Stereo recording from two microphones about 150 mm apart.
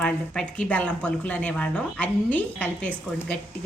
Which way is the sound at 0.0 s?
10° left (ahead or behind).